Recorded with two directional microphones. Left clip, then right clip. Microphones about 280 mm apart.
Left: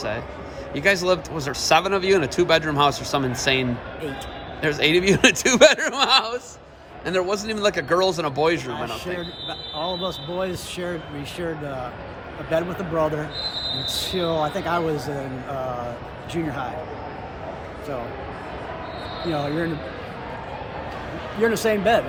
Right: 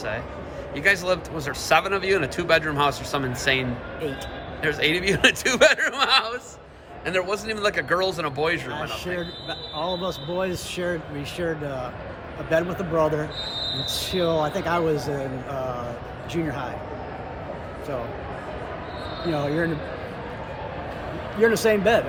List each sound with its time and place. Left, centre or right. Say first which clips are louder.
0.8 s speech: left 2 dB; left
8.7 s speech: left 1 dB; centre
19.3 s speech: right 1 dB; centre
21.4 s speech: right 1 dB; centre